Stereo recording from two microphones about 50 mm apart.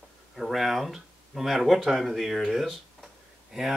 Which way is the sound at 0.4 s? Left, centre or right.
Centre.